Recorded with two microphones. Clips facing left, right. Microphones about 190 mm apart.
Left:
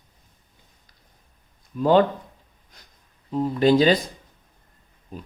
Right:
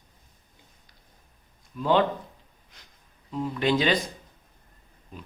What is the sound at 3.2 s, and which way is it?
Speech, 40° left (ahead or behind).